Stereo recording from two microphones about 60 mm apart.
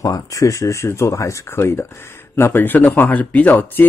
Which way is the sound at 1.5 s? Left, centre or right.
Left.